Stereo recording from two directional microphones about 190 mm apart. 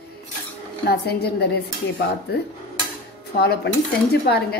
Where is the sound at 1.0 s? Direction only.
55° left (ahead or behind).